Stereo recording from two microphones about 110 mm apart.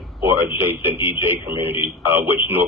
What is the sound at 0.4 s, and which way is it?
A man's voice, 20° right (ahead or behind).